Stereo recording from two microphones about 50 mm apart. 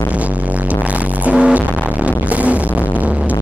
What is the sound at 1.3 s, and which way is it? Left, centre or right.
Music, right.